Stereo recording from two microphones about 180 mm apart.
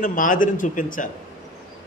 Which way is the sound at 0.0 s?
50° left (ahead or behind).